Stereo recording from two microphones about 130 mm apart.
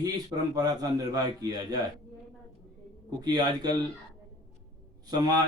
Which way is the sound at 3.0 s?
30° right (ahead or behind).